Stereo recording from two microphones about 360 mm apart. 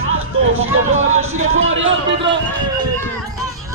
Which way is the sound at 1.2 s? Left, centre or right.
Right.